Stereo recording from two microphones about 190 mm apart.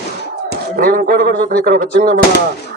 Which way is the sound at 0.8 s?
50° right (ahead or behind).